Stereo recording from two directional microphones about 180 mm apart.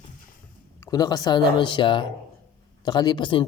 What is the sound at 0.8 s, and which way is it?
Speech, 20° left (ahead or behind).